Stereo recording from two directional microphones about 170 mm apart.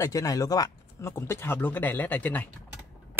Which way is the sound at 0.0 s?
20° left (ahead or behind).